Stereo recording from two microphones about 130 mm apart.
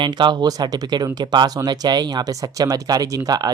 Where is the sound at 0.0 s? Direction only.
35° right (ahead or behind).